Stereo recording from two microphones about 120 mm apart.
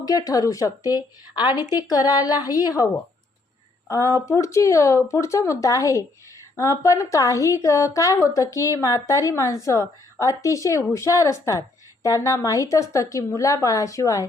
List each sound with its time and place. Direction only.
0.0 s speech: 30° left (ahead or behind)